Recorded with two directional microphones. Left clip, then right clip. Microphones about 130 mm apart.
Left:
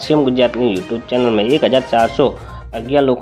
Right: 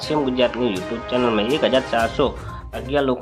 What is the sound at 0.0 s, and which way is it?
Speech, 35° left (ahead or behind).